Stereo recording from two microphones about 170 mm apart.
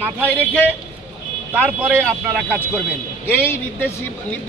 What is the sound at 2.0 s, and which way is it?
Speech, centre (ahead or behind).